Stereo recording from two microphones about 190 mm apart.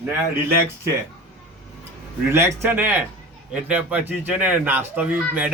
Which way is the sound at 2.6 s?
10° right (ahead or behind).